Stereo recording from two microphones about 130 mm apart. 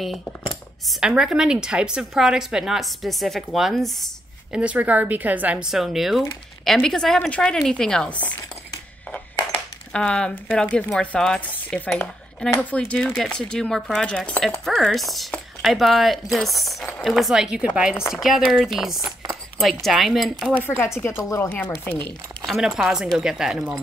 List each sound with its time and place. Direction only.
0.8 s a woman's voice: 5° right (ahead or behind)
4.6 s a woman's voice: 10° right (ahead or behind); by 8.4 s 10° left (ahead or behind)
9.9 s a woman's voice: 5° left (ahead or behind)
20.5 s speech: 15° left (ahead or behind)
22.5 s a woman's voice: centre (ahead or behind)